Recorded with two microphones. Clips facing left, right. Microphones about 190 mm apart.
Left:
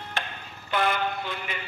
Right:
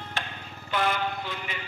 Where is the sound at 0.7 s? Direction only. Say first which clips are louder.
Left 1 dB; 55° left (ahead or behind).